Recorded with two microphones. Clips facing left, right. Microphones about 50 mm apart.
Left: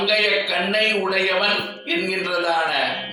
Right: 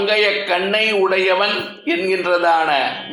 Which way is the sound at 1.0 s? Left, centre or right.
Right.